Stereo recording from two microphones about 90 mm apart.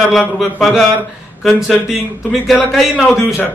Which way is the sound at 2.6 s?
Centre (ahead or behind).